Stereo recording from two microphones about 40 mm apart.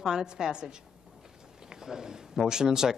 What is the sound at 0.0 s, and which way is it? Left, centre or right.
Speech, centre.